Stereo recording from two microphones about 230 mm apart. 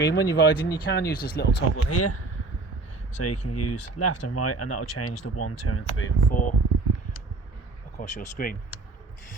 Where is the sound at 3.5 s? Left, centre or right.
Left.